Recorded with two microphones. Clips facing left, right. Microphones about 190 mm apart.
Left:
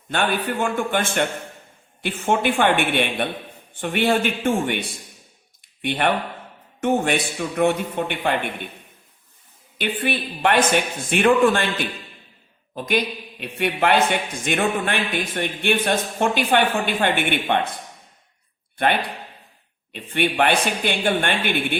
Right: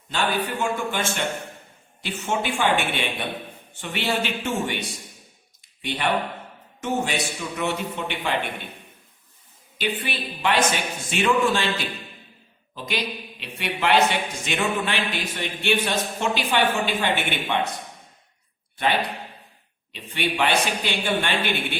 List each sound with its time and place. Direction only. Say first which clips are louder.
0.1 s speech: left 2 dB; 55° left (ahead or behind)
5.8 s speech: left 3 dB; 55° left (ahead or behind)
9.7 s speech: left 4 dB; 55° left (ahead or behind)
13.4 s speech: left 5 dB; 55° left (ahead or behind)
19.9 s speech: left 4 dB; 55° left (ahead or behind)